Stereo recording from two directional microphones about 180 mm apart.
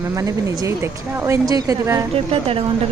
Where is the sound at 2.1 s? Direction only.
30° right (ahead or behind).